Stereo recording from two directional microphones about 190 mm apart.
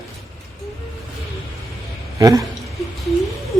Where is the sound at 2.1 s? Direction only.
20° right (ahead or behind).